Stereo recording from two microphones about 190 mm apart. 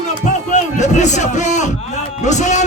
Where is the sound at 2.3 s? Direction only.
40° left (ahead or behind).